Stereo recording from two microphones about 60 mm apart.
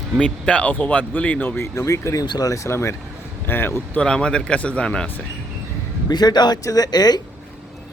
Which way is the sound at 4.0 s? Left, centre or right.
Centre.